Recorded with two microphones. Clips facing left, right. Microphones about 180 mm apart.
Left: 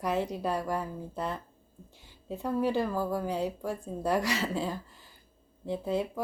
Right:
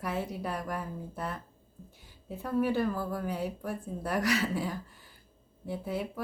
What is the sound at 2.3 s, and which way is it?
Speech, 15° left (ahead or behind).